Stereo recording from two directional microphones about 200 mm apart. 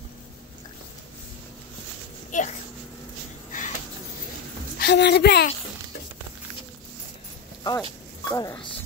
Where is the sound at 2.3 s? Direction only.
40° left (ahead or behind).